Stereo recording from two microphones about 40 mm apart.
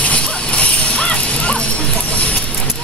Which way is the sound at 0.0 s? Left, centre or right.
Left.